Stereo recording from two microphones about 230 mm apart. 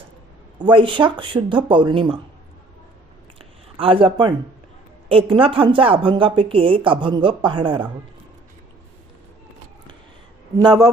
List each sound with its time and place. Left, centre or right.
0.6 s speech: right
3.8 s speech: right
10.6 s speech: centre